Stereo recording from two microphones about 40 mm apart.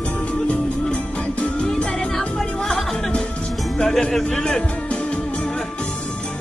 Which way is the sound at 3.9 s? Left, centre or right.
Centre.